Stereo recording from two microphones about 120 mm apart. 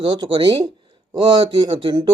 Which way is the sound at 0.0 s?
40° right (ahead or behind).